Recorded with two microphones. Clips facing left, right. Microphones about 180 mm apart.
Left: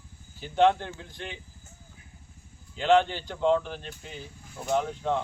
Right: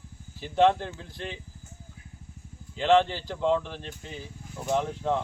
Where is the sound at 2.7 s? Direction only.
Centre (ahead or behind).